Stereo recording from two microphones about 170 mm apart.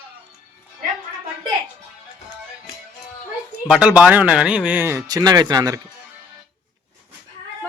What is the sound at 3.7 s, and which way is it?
Speech, 5° right (ahead or behind).